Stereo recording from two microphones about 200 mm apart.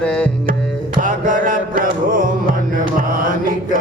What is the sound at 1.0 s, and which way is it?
Music, 40° right (ahead or behind).